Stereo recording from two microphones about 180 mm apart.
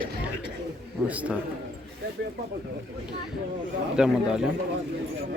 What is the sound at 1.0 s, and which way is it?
Speech, 10° right (ahead or behind).